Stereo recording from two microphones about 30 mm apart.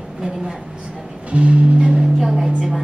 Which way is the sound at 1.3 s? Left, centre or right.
Right.